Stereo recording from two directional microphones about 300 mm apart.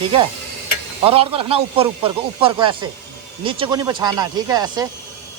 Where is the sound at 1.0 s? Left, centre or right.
Centre.